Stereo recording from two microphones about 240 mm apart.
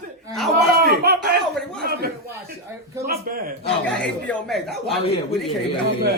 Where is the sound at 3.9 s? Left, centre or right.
Centre.